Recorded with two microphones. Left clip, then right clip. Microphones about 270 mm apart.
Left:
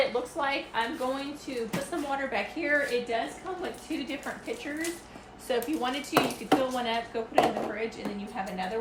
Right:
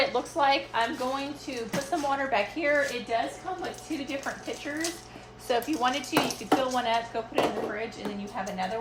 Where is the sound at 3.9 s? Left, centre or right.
Centre.